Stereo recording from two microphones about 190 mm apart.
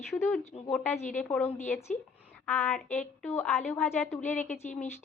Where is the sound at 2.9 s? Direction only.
10° left (ahead or behind).